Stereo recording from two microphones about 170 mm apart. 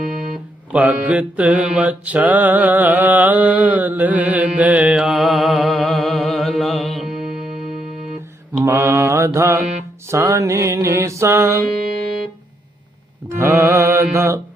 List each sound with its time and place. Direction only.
0.0 s music: 50° right (ahead or behind)
0.7 s music: 10° right (ahead or behind)
8.6 s music: 15° right (ahead or behind)
13.2 s music: 15° right (ahead or behind)